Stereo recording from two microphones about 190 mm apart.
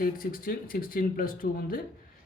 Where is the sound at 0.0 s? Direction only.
50° left (ahead or behind).